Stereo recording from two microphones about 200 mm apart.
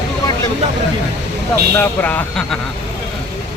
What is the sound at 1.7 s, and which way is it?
Speech, 10° left (ahead or behind).